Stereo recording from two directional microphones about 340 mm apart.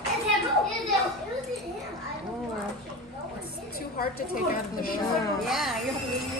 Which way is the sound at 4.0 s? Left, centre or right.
Left.